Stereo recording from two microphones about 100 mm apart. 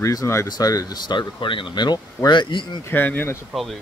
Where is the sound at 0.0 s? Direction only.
35° left (ahead or behind); by 2.8 s 50° left (ahead or behind).